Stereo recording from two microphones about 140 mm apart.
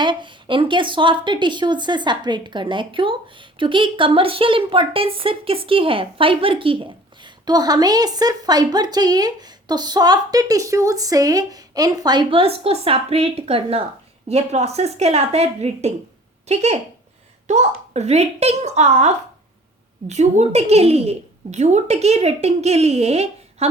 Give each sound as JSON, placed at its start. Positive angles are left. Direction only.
{"t": 0.0, "sound": "a woman's voice", "side_deg": -35}